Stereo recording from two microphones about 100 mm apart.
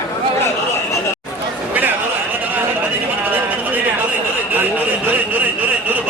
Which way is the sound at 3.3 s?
15° right (ahead or behind).